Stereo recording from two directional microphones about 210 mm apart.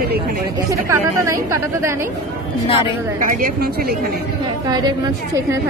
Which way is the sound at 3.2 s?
45° right (ahead or behind).